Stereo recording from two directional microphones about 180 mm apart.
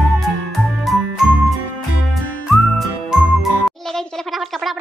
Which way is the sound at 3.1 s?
Centre (ahead or behind).